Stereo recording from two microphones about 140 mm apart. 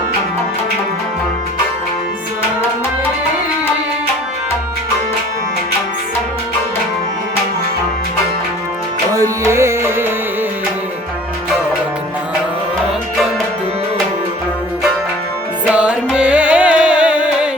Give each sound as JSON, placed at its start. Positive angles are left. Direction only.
{"t": 9.4, "sound": "music", "side_deg": -20}
{"t": 15.7, "sound": "music", "side_deg": -10}